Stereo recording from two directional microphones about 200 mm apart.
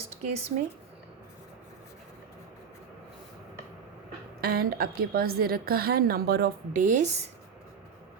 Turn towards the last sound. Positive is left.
turn(degrees=-35)  # may be behind; listen again after turning